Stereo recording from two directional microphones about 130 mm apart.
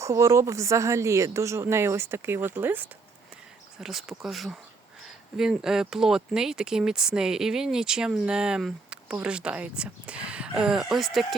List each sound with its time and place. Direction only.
0.0 s speech: 25° right (ahead or behind)
3.8 s speech: centre (ahead or behind)